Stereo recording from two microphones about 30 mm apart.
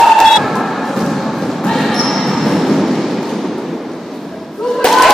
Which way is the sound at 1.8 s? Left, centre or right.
Centre.